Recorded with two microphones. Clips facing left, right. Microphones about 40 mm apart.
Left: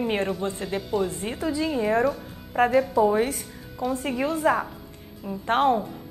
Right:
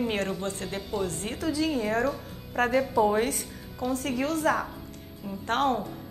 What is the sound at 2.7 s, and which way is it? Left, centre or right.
Speech, centre.